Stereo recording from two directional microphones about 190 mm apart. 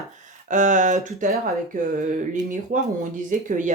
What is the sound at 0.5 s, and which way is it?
Speech, 40° right (ahead or behind).